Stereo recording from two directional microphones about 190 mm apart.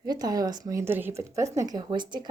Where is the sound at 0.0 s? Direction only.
20° right (ahead or behind).